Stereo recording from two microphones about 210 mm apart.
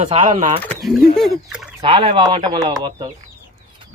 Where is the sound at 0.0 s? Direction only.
30° right (ahead or behind).